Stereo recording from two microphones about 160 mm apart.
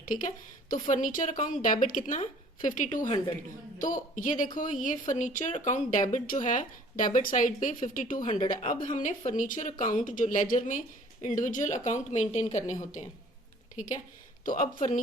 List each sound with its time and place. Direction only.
0.0 s a woman's voice: 55° left (ahead or behind)